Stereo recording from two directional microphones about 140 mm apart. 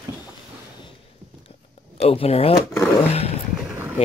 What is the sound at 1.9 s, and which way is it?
Speech, 45° left (ahead or behind).